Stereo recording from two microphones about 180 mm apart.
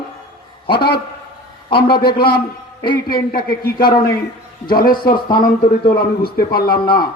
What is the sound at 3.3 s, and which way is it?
Speech, 55° left (ahead or behind).